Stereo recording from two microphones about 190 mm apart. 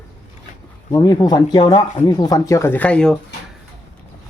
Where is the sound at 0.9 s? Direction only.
20° left (ahead or behind).